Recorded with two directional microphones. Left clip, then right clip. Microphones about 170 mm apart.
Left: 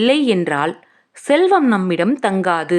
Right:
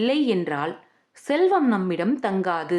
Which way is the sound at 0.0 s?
30° left (ahead or behind).